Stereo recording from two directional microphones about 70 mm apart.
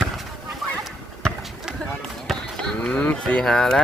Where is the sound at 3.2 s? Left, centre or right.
Centre.